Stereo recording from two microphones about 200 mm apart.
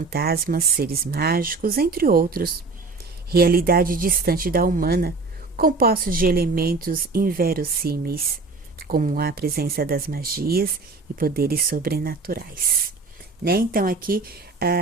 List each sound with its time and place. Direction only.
0.1 s a woman's voice: 50° right (ahead or behind)
13.4 s a woman's voice: 45° right (ahead or behind)